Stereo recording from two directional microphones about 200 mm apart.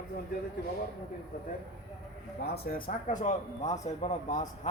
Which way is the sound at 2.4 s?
50° left (ahead or behind).